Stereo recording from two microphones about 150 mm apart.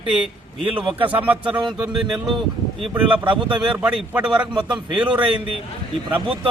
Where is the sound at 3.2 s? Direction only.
30° right (ahead or behind).